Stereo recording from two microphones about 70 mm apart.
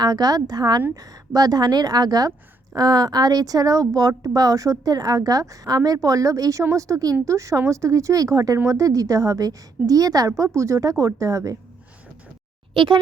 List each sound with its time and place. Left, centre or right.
0.0 s a woman's voice: right
0.9 s a woman's voice: right
8.5 s a woman's voice: right